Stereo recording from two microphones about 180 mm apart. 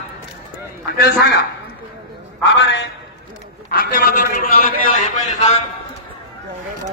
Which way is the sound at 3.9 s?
50° left (ahead or behind).